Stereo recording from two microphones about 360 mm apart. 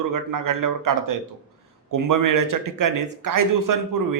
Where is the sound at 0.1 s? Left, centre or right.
Right.